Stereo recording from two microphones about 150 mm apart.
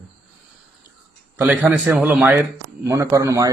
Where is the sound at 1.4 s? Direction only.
10° right (ahead or behind).